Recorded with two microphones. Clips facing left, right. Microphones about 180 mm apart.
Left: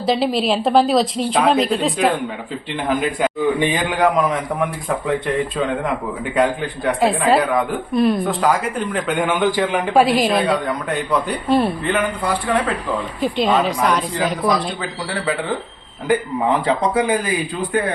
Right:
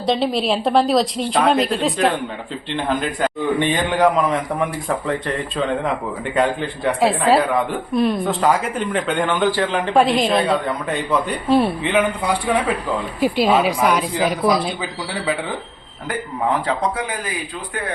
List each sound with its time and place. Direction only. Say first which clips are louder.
0.0 s speech: left 1 dB; centre (ahead or behind)
6.3 s a woman's voice: left 1 dB; centre (ahead or behind)